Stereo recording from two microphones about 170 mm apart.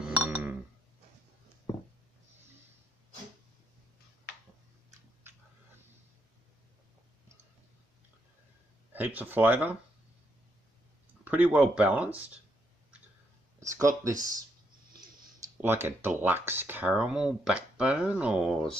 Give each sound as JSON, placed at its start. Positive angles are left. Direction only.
{"t": 0.0, "sound": "chink", "side_deg": -10}
{"t": 8.9, "sound": "speech", "side_deg": -10}
{"t": 11.2, "sound": "speech", "side_deg": -10}
{"t": 13.6, "sound": "speech", "side_deg": -20}
{"t": 15.5, "sound": "speech", "side_deg": -15}